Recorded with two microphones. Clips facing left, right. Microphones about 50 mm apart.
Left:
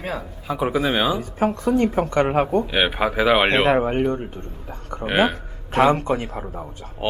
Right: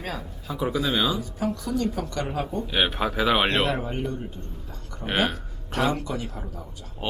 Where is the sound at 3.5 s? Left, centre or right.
Left.